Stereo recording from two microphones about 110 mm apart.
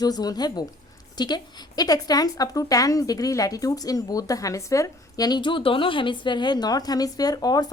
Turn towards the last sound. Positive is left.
turn(degrees=35)  # may be behind; listen again after turning